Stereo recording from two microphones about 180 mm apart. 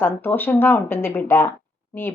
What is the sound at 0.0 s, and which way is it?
A woman's voice, 10° left (ahead or behind).